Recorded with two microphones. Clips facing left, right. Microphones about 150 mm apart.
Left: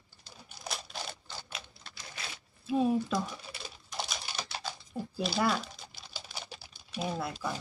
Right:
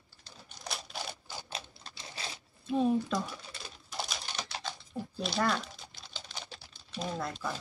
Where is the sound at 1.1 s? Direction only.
10° right (ahead or behind).